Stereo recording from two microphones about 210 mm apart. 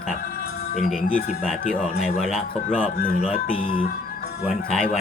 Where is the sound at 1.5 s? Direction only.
5° left (ahead or behind).